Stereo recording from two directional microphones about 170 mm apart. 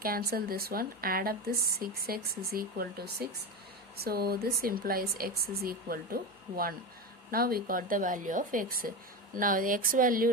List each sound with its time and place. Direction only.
0.0 s speech: 60° right (ahead or behind)
7.3 s speech: 60° right (ahead or behind)